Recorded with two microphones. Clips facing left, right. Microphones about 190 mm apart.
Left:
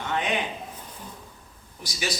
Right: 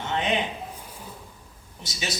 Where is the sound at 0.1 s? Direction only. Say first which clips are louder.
Right 1 dB; 20° right (ahead or behind).